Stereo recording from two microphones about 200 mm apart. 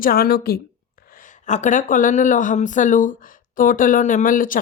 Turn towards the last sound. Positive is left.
turn(degrees=45)  # may be behind; listen again after turning